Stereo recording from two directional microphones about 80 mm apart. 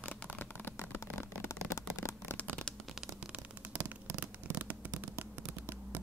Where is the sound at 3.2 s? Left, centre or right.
Centre.